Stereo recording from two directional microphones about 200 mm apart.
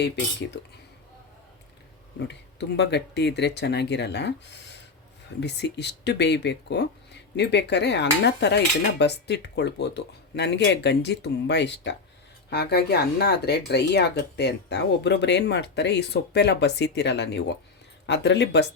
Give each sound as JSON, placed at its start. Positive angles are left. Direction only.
{"t": 2.1, "sound": "speech", "side_deg": 60}